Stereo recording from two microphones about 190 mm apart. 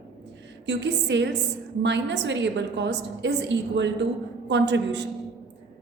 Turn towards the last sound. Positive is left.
turn(degrees=-65)  # may be behind; listen again after turning